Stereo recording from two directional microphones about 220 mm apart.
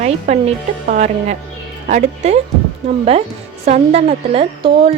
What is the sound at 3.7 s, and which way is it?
Speech, 25° right (ahead or behind).